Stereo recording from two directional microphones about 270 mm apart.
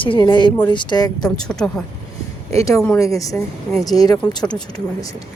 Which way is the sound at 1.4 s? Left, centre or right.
Centre.